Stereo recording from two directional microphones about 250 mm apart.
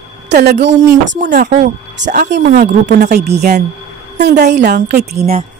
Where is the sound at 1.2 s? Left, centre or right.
Right.